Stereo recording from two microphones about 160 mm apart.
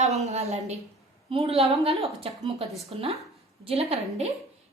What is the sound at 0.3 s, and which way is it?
A woman's voice, 40° right (ahead or behind).